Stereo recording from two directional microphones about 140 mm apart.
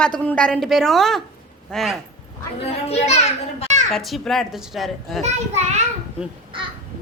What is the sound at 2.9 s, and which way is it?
Speech, 50° left (ahead or behind).